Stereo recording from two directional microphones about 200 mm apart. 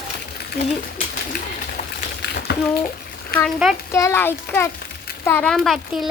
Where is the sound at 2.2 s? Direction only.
55° left (ahead or behind).